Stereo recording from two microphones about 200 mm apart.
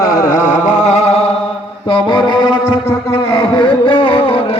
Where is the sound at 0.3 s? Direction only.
40° left (ahead or behind).